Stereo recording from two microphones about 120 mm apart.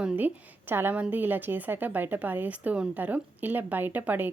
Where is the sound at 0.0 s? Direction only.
10° right (ahead or behind).